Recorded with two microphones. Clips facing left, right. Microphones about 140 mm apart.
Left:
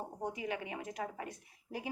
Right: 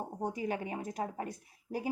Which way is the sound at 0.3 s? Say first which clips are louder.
Right 4 dB; 40° right (ahead or behind).